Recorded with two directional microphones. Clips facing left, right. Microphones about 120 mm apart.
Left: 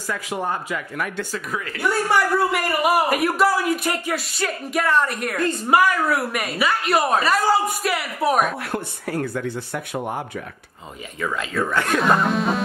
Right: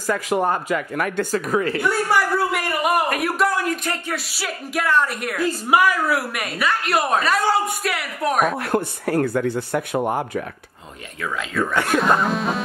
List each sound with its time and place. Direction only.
0.0 s speech: 45° right (ahead or behind)
1.8 s a woman's voice: centre (ahead or behind)
4.3 s a woman's voice: 5° right (ahead or behind)
8.7 s speech: 50° right (ahead or behind)
11.1 s a woman's voice: centre (ahead or behind)